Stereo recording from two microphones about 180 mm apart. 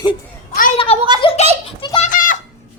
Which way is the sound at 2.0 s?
50° left (ahead or behind).